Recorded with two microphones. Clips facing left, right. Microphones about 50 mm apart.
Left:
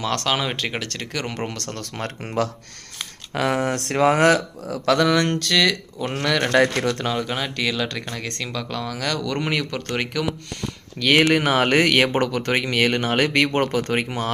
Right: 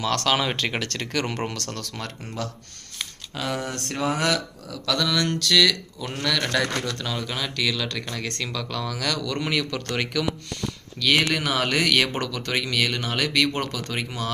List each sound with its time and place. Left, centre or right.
0.0 s speech: centre
1.5 s speech: left
2.2 s speech: left
3.3 s speech: left
3.8 s speech: left
5.2 s speech: left; by 10.2 s centre
11.0 s speech: left